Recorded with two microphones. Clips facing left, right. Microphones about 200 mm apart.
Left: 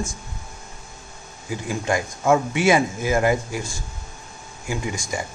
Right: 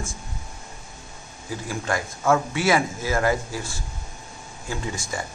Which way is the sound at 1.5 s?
15° left (ahead or behind).